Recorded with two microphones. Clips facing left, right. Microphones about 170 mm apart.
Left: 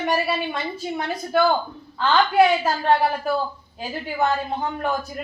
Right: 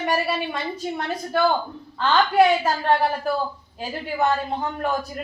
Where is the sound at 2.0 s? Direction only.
Centre (ahead or behind).